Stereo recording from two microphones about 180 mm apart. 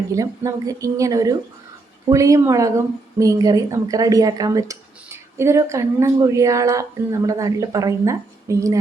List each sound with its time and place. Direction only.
0.1 s a woman's voice: 20° right (ahead or behind)